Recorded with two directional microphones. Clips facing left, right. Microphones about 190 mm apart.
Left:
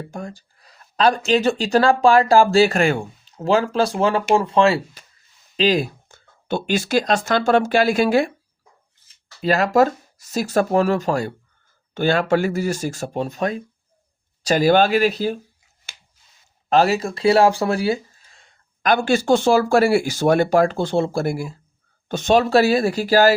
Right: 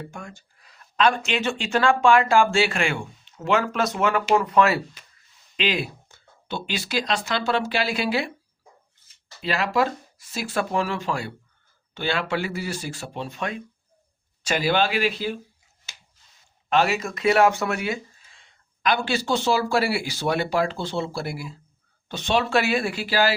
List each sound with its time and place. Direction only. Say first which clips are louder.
0.0 s speech: left 6 dB; 35° left (ahead or behind)
5.5 s speech: left 7 dB; 40° left (ahead or behind)
9.4 s speech: left 7 dB; 45° left (ahead or behind)
16.6 s speech: left 5 dB; 35° left (ahead or behind)